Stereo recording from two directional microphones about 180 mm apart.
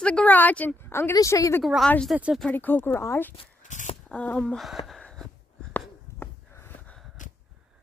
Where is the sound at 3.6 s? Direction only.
45° left (ahead or behind).